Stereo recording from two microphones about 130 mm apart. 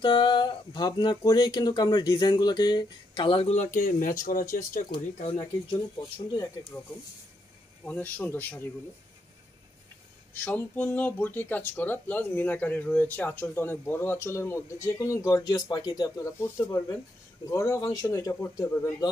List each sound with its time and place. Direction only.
0.0 s speech: 40° left (ahead or behind)
3.5 s speech: 80° left
4.9 s speech: 40° left (ahead or behind)
6.7 s speech: 20° left (ahead or behind)
7.8 s speech: 10° left (ahead or behind)
10.3 s speech: 15° left (ahead or behind)